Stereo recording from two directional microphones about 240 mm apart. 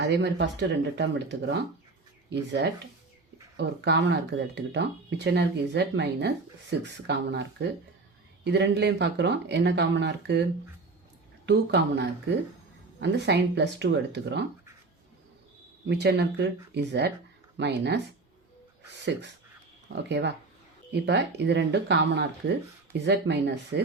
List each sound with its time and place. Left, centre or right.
0.0 s speech: right
15.9 s speech: right